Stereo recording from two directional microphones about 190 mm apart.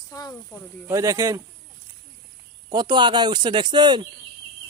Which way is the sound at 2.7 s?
20° right (ahead or behind).